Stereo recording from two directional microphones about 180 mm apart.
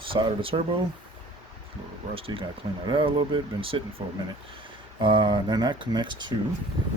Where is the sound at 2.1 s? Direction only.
30° right (ahead or behind).